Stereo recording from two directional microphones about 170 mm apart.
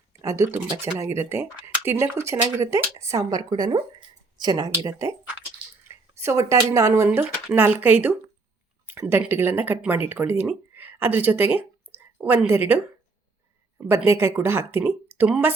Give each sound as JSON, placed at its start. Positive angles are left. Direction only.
{"t": 0.2, "sound": "speech", "side_deg": -15}
{"t": 5.9, "sound": "a sound", "side_deg": -15}
{"t": 6.7, "sound": "a woman's voice", "side_deg": -20}